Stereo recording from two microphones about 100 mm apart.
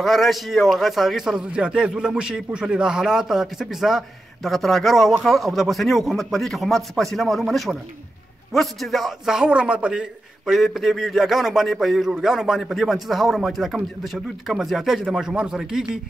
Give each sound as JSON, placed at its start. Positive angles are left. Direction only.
{"t": 0.0, "sound": "a man's voice", "side_deg": 0}